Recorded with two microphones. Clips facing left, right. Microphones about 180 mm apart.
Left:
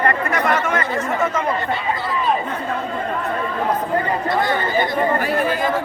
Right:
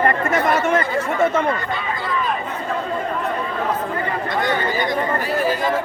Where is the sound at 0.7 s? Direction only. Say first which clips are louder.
Right 2 dB; 30° right (ahead or behind).